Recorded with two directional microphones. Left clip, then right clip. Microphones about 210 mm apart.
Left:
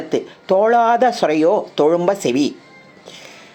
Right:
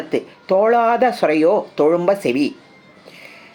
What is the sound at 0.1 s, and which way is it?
Speech, 15° left (ahead or behind).